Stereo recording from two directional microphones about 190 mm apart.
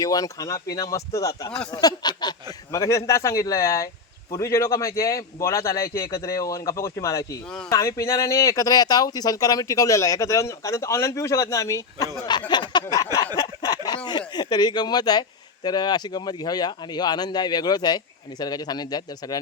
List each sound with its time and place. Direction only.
0.0 s speech: 20° left (ahead or behind)
12.5 s a sound: 25° left (ahead or behind)
13.1 s speech: 20° left (ahead or behind)